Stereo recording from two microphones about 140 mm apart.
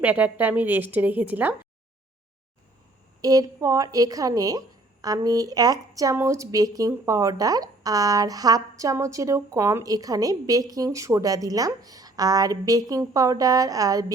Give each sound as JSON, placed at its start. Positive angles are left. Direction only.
{"t": 0.0, "sound": "a woman's voice", "side_deg": -10}
{"t": 3.2, "sound": "speech", "side_deg": -25}